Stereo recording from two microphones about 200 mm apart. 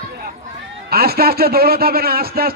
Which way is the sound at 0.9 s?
50° right (ahead or behind).